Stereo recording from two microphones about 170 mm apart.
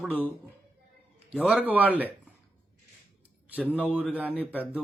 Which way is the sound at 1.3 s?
5° right (ahead or behind).